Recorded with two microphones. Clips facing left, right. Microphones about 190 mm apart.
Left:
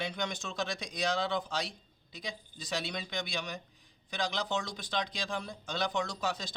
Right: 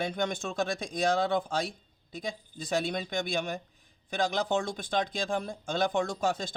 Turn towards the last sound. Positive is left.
turn(degrees=-50)  # may be behind; listen again after turning